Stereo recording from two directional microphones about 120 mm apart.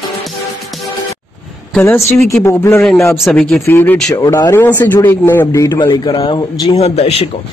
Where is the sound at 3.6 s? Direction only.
20° left (ahead or behind).